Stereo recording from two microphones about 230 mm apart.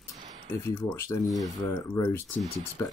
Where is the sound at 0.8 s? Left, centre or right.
Centre.